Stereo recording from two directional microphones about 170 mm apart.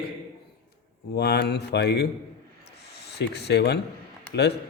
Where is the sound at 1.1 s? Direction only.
75° left (ahead or behind).